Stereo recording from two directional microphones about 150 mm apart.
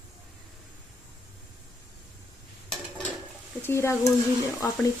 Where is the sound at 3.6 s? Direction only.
20° left (ahead or behind).